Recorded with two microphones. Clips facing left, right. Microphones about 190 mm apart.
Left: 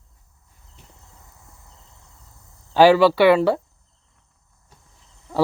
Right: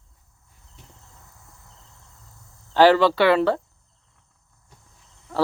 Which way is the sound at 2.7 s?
10° left (ahead or behind).